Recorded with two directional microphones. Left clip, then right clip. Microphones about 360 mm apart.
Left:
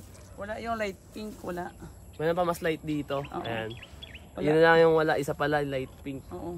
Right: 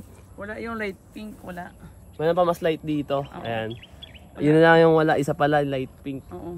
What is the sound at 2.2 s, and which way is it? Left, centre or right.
Speech, centre.